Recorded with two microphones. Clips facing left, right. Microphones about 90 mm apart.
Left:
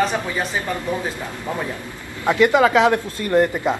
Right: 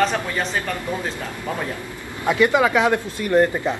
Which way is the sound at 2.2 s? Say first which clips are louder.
Left 2 dB; 15° left (ahead or behind).